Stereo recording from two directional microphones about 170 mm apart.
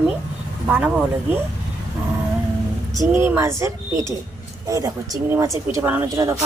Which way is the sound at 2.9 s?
15° right (ahead or behind).